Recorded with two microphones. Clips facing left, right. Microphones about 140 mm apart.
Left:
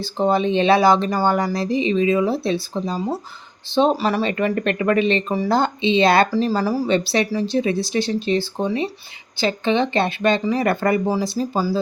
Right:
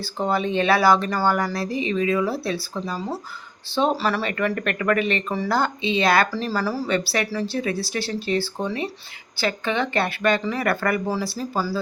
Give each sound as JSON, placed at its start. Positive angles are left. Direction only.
{"t": 0.0, "sound": "speech", "side_deg": 20}